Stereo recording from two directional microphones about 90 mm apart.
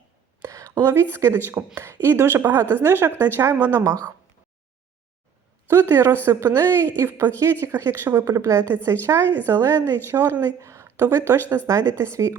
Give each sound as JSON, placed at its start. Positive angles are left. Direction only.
{"t": 0.4, "sound": "a sound", "side_deg": -35}
{"t": 0.8, "sound": "a woman's voice", "side_deg": -30}
{"t": 5.6, "sound": "a woman's voice", "side_deg": -30}